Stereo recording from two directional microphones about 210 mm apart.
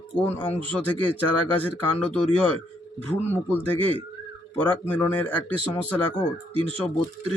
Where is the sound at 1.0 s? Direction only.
90° left.